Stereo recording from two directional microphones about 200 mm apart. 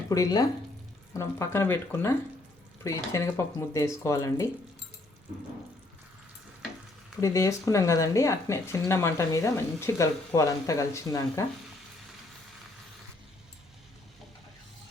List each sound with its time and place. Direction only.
0.1 s speech: 15° left (ahead or behind)
7.2 s speech: 15° left (ahead or behind)